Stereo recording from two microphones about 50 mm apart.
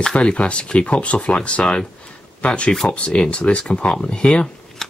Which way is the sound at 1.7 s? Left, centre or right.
Left.